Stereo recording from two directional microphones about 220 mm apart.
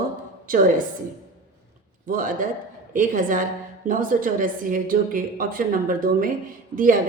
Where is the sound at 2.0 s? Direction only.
40° right (ahead or behind).